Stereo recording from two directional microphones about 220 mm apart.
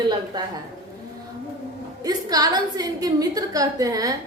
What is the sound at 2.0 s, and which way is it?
A woman's voice, 15° right (ahead or behind).